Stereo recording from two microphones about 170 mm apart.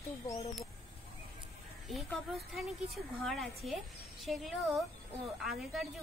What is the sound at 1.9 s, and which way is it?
A woman's voice, centre (ahead or behind).